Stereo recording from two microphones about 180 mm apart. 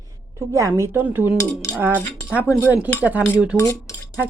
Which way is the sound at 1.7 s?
10° right (ahead or behind).